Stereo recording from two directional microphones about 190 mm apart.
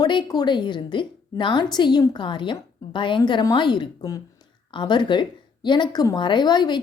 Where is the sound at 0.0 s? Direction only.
25° left (ahead or behind).